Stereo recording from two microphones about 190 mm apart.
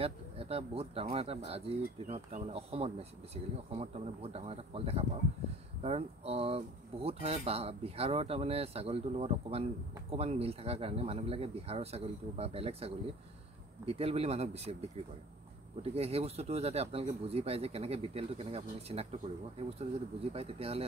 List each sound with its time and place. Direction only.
0.0 s speech: 30° right (ahead or behind)
20.3 s speech: 30° right (ahead or behind)